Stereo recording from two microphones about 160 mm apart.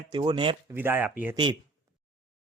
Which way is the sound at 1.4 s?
30° right (ahead or behind).